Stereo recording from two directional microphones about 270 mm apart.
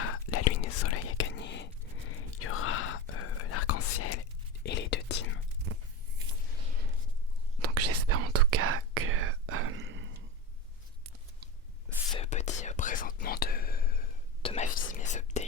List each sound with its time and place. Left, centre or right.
0.0 s whispering: left
1.2 s whispering: left
4.6 s whispering: left
7.6 s whispering: right
12.1 s whispering: left